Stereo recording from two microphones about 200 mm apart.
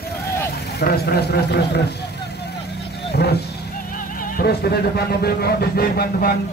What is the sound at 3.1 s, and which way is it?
Vehicle, 55° left (ahead or behind).